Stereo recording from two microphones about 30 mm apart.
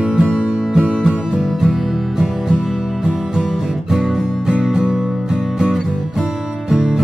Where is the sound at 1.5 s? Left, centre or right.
Centre.